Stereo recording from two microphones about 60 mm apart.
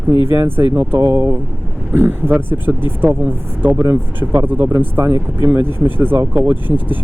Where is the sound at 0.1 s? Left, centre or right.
Right.